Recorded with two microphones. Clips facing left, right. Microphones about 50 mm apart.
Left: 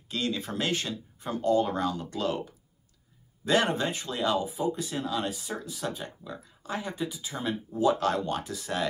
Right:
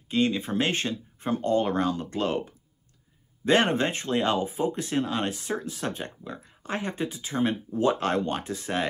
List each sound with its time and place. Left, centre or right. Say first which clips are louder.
0.1 s speech: right 6 dB; right